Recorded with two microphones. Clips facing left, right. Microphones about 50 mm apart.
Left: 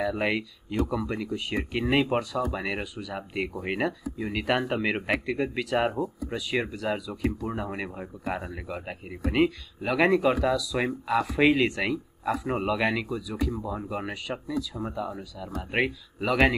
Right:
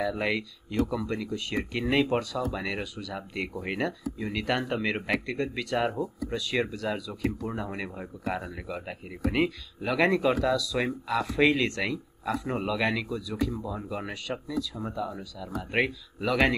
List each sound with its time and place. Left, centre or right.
0.0 s speech: centre
15.0 s speech: centre
16.3 s speech: centre